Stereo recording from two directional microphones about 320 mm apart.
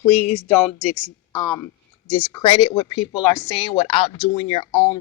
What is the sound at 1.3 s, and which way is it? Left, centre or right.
Speech, centre.